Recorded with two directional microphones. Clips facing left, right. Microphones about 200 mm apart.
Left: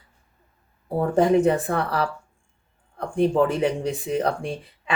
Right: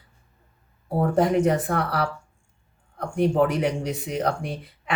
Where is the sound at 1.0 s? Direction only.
30° left (ahead or behind).